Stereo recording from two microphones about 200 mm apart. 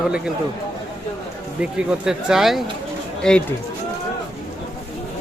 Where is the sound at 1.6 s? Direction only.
5° right (ahead or behind).